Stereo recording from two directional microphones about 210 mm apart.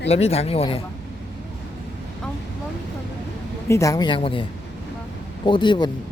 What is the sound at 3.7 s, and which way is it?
Speech, 15° left (ahead or behind).